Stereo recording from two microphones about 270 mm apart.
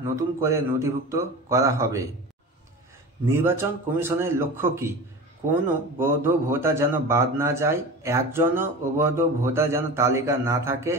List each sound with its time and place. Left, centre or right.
0.1 s a man's voice: centre
3.3 s a man's voice: centre
5.9 s a man's voice: centre